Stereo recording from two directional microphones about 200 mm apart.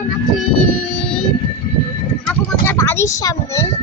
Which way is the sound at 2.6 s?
10° left (ahead or behind).